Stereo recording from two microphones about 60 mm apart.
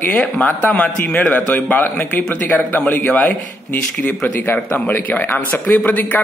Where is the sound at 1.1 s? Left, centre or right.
Left.